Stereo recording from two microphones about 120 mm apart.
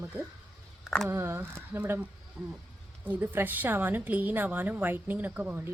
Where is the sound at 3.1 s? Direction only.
15° right (ahead or behind).